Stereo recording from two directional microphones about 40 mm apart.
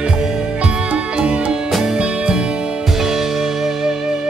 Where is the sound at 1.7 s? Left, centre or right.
Centre.